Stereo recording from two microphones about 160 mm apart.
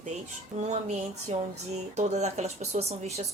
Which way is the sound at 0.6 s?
45° right (ahead or behind).